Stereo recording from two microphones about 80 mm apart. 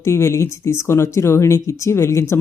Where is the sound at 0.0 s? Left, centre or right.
Left.